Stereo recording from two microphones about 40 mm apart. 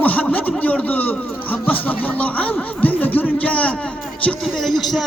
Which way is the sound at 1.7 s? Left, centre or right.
Left.